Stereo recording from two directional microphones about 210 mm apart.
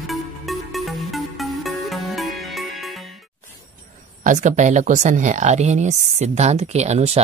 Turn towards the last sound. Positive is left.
turn(degrees=-30)  # may be behind; listen again after turning